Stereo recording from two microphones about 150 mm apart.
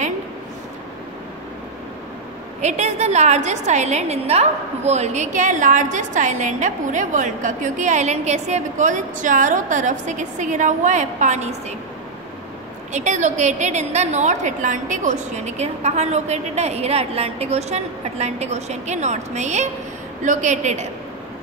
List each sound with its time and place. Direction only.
2.6 s a woman's voice: 50° right (ahead or behind)
12.9 s a woman's voice: 50° right (ahead or behind)